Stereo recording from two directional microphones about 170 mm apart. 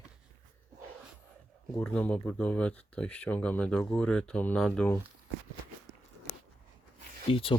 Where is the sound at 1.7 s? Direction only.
10° left (ahead or behind).